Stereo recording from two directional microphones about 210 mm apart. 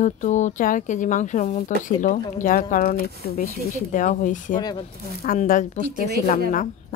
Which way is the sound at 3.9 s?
40° left (ahead or behind).